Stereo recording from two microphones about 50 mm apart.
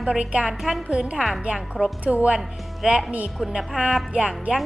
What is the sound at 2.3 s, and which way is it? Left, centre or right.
A woman's voice, centre.